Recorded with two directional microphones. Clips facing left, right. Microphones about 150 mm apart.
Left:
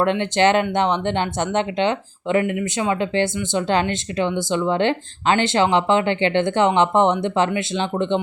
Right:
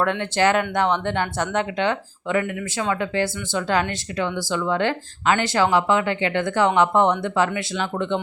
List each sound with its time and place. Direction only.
0.0 s speech: 20° left (ahead or behind)